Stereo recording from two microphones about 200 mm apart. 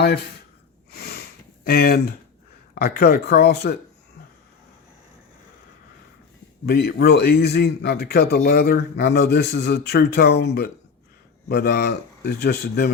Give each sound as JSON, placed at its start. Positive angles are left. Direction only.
{"t": 0.0, "sound": "speech", "side_deg": 55}
{"t": 0.9, "sound": "sniff", "side_deg": 50}
{"t": 2.7, "sound": "a man's voice", "side_deg": 50}
{"t": 6.7, "sound": "a man's voice", "side_deg": 50}